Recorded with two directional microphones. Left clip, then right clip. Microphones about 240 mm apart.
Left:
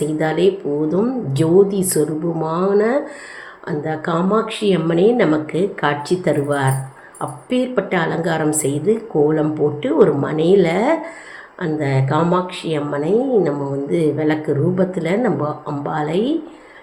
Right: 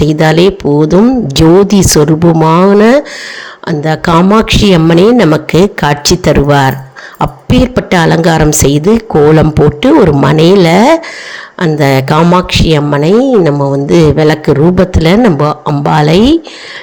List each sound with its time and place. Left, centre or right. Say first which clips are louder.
0.0 s a woman's voice: right 10 dB; right